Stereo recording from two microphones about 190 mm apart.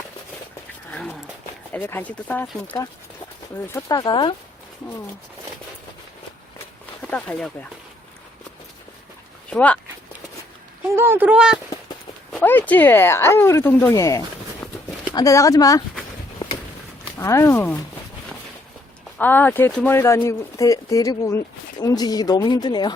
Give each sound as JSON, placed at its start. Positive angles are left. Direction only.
{"t": 0.9, "sound": "dog", "side_deg": 5}
{"t": 1.7, "sound": "speech", "side_deg": 10}
{"t": 3.7, "sound": "speech", "side_deg": 15}
{"t": 7.1, "sound": "speech", "side_deg": 5}
{"t": 9.5, "sound": "speech", "side_deg": 5}
{"t": 10.8, "sound": "speech", "side_deg": -15}
{"t": 12.3, "sound": "speech", "side_deg": 10}
{"t": 17.2, "sound": "speech", "side_deg": 15}
{"t": 19.2, "sound": "speech", "side_deg": 10}